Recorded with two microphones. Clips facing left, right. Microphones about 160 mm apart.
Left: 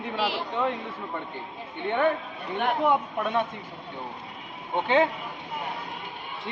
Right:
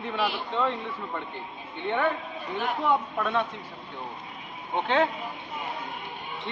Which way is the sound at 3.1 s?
20° left (ahead or behind).